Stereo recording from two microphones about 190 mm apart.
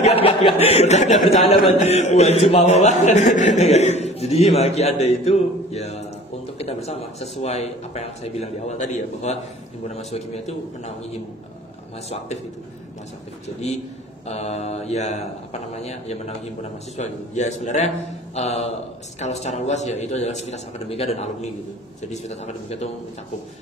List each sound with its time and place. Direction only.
0.0 s a man's voice: 30° left (ahead or behind)
14.2 s a man's voice: 35° left (ahead or behind)